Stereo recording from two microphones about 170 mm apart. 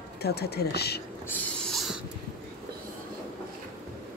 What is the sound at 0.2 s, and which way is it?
Speech, 70° left (ahead or behind).